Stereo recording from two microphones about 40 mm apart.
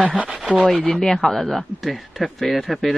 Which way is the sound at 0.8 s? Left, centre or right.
Centre.